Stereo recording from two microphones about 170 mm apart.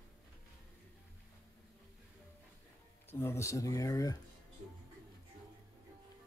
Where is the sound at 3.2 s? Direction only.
15° left (ahead or behind).